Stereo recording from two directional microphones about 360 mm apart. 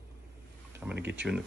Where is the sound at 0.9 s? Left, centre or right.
Right.